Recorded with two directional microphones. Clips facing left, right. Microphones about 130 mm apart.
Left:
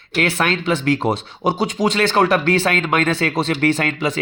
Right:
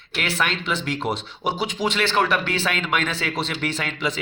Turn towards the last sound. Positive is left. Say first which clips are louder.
# left 8 dB
turn(degrees=50)  # may be behind; listen again after turning